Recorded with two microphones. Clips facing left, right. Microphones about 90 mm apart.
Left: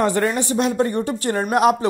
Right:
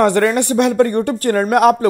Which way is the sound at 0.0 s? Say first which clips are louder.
Right 6 dB; 65° right (ahead or behind).